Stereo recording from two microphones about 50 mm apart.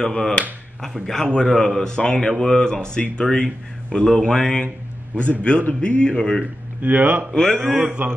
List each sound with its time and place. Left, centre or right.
0.0 s a man's voice: centre
5.4 s a man's voice: left
6.8 s speech: right
7.3 s a man's voice: centre
7.7 s a man's voice: right